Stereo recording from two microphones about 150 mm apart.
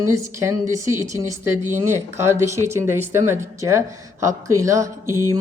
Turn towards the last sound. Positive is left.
turn(degrees=-20)  # may be behind; listen again after turning